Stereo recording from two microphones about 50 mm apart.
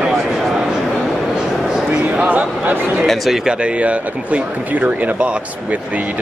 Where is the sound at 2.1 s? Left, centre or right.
Right.